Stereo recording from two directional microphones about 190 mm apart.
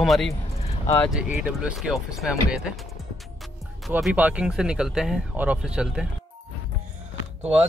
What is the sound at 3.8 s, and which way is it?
Speech, 5° right (ahead or behind).